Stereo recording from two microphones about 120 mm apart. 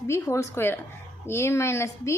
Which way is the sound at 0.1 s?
25° left (ahead or behind).